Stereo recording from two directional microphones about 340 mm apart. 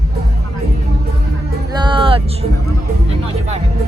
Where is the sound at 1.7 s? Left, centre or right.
Centre.